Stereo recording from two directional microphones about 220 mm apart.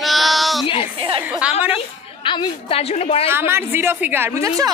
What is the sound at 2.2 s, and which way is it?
A woman's voice, 25° left (ahead or behind).